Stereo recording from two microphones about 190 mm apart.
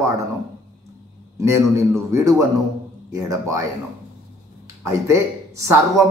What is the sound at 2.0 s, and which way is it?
Speech, 15° right (ahead or behind).